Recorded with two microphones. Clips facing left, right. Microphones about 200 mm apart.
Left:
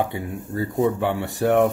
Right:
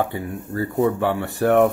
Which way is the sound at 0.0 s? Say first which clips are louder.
Right 1 dB; 15° left (ahead or behind).